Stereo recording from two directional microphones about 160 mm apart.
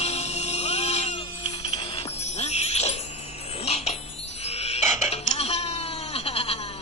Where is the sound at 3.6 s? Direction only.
40° left (ahead or behind).